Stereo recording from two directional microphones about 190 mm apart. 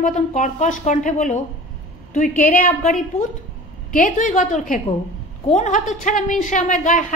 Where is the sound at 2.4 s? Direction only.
45° left (ahead or behind).